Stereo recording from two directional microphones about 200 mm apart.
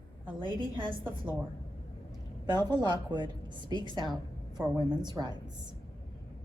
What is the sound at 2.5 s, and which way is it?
A woman's voice, 20° right (ahead or behind).